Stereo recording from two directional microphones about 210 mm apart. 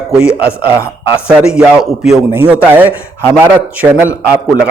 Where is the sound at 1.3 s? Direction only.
5° right (ahead or behind).